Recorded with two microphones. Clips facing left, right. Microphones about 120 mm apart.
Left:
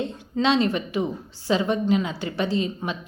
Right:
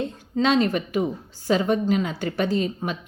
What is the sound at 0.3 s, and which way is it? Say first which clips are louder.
Music: right 1 dB; 45° right (ahead or behind).